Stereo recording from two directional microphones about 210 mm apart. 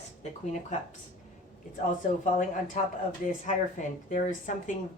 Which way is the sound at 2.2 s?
35° left (ahead or behind).